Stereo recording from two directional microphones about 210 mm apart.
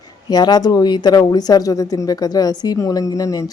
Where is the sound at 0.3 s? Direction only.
20° left (ahead or behind).